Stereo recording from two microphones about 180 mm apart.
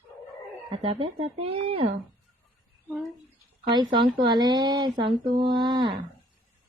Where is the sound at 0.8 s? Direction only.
35° right (ahead or behind).